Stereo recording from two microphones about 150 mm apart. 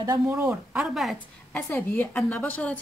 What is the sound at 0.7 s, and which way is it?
Speech, centre (ahead or behind).